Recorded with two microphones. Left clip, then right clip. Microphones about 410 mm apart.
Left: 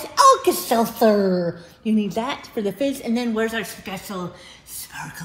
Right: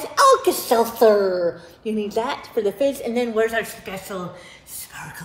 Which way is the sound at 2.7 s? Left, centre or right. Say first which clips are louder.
Right 3 dB; left.